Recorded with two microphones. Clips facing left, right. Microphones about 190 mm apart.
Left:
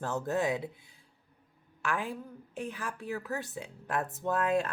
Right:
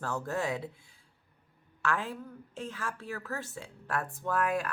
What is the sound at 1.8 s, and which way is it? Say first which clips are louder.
A woman's voice: right 1 dB; 15° left (ahead or behind).